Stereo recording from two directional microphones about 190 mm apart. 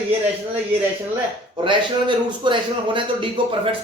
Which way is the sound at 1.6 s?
25° right (ahead or behind).